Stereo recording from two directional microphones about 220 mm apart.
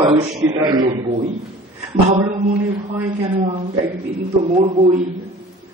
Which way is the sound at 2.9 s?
15° right (ahead or behind).